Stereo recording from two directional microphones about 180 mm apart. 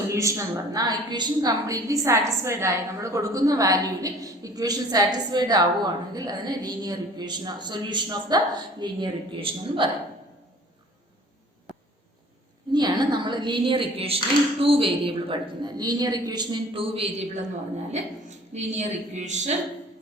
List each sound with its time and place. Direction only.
0.1 s a woman's voice: 15° right (ahead or behind)
12.7 s a woman's voice: 25° right (ahead or behind)
18.5 s a woman's voice: 40° right (ahead or behind)